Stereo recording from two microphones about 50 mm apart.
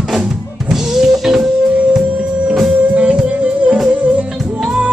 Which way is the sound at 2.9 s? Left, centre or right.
Right.